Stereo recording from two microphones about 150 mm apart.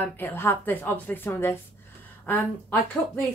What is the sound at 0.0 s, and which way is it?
A woman's voice, 15° left (ahead or behind).